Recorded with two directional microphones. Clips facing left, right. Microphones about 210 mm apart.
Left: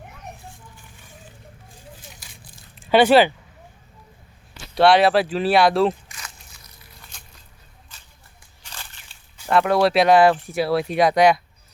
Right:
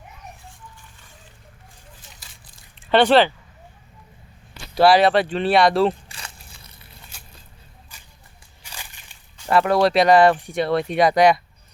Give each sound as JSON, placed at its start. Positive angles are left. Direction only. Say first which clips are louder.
{"t": 2.0, "sound": "a sound", "louder": "left 4 dB", "side_deg": 0}
{"t": 2.9, "sound": "speech", "louder": "left 1 dB", "side_deg": 5}
{"t": 4.7, "sound": "speech", "louder": "even", "side_deg": 0}
{"t": 6.1, "sound": "crunch", "louder": "right 1 dB", "side_deg": -30}
{"t": 7.1, "sound": "a sound", "louder": "right 2 dB", "side_deg": -10}
{"t": 8.6, "sound": "slosh", "louder": "right 1 dB", "side_deg": -10}
{"t": 9.5, "sound": "speech", "louder": "even", "side_deg": 0}